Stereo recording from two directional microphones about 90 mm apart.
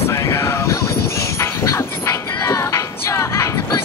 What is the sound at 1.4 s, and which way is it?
Music, 30° left (ahead or behind).